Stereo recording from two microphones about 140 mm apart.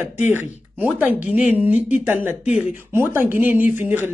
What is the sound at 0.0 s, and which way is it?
Speech, 15° right (ahead or behind).